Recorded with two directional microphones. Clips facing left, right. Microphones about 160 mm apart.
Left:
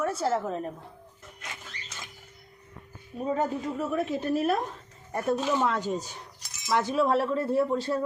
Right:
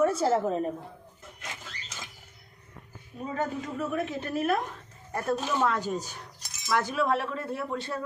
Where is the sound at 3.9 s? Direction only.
35° left (ahead or behind).